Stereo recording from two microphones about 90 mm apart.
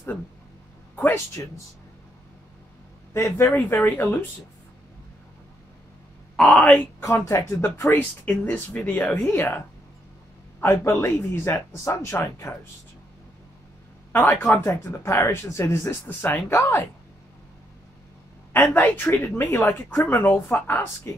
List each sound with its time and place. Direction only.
0.9 s speech: 25° left (ahead or behind)
3.1 s speech: 35° left (ahead or behind)
6.4 s speech: 15° left (ahead or behind)
7.0 s speech: 35° left (ahead or behind)
8.3 s speech: 15° left (ahead or behind)
10.6 s speech: 30° left (ahead or behind)
14.1 s speech: 25° left (ahead or behind)
18.5 s speech: 15° left (ahead or behind)
18.9 s speech: 25° left (ahead or behind)